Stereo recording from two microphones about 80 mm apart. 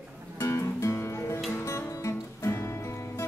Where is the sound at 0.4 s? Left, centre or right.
Left.